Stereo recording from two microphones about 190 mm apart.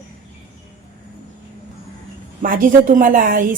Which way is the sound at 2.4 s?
45° right (ahead or behind).